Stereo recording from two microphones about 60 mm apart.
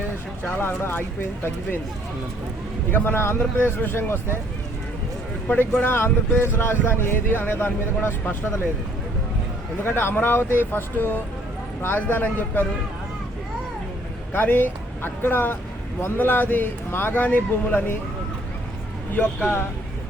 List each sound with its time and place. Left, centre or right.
0.4 s speech: left
2.9 s speech: left
5.8 s a man's voice: left
9.8 s speech: left
14.3 s speech: left
19.1 s speech: left